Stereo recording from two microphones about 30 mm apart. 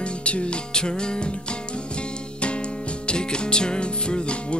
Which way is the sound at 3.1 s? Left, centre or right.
Left.